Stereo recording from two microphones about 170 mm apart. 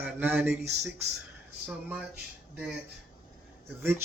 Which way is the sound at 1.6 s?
10° right (ahead or behind).